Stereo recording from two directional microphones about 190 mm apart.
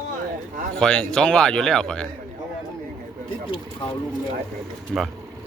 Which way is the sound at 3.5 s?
25° left (ahead or behind).